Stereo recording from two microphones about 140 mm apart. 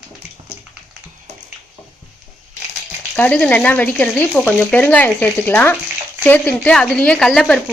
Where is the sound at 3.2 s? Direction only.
10° left (ahead or behind).